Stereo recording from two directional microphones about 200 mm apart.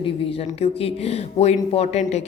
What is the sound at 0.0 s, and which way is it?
Speech, 30° left (ahead or behind).